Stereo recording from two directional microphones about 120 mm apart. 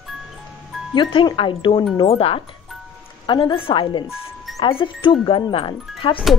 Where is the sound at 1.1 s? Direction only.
45° left (ahead or behind).